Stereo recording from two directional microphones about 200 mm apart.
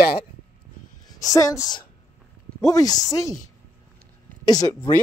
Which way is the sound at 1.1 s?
20° left (ahead or behind).